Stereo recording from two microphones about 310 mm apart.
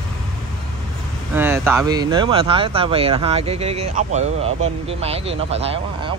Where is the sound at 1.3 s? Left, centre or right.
Centre.